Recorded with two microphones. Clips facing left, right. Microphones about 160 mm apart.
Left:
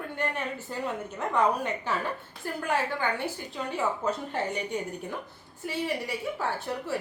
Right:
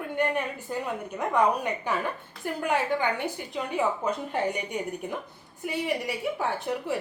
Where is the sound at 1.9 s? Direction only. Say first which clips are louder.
Right 2 dB; 15° right (ahead or behind).